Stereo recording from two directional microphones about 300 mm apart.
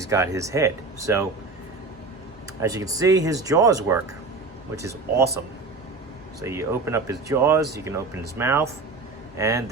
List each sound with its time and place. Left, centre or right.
0.0 s speech: centre
2.6 s speech: centre
6.4 s speech: centre